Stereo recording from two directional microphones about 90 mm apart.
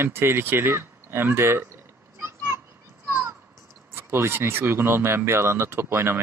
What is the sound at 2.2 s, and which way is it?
Children playing, 25° right (ahead or behind).